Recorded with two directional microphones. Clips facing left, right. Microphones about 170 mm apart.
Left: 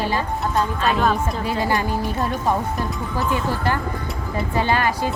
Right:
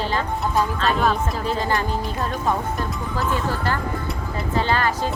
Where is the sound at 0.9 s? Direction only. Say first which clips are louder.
Left 1 dB; centre (ahead or behind).